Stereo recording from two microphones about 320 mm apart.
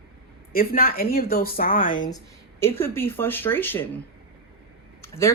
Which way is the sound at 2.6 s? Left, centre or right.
Centre.